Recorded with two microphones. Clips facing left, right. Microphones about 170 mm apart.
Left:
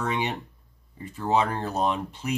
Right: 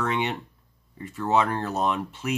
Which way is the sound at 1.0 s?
30° left (ahead or behind).